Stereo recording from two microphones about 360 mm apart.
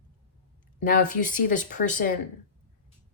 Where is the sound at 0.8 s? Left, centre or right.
Left.